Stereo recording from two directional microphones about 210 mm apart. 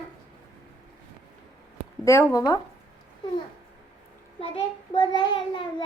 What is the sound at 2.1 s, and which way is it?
Speech, 15° left (ahead or behind).